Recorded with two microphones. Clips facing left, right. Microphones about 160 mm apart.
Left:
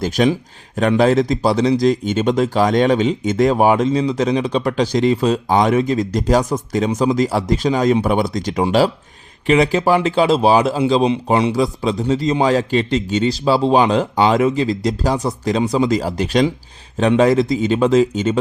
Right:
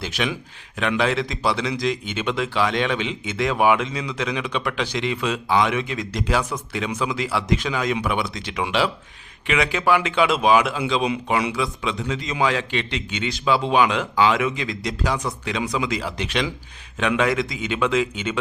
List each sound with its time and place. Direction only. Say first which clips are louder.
0.0 s speech: left 10 dB; 45° left (ahead or behind)